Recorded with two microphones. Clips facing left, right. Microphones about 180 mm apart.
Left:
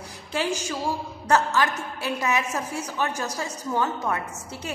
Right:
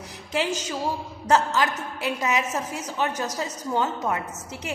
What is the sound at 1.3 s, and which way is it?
A woman's voice, 15° right (ahead or behind).